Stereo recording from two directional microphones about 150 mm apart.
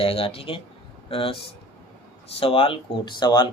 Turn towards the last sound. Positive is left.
turn(degrees=30)  # may be behind; listen again after turning